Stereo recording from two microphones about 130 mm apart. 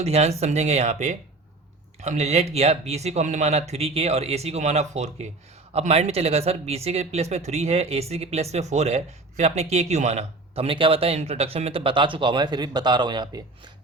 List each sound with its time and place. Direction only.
0.0 s speech: 55° right (ahead or behind); by 13.4 s 35° right (ahead or behind)